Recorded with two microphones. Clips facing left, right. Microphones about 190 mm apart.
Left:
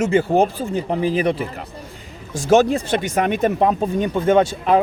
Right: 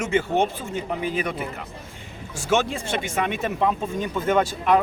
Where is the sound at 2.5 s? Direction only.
40° left (ahead or behind).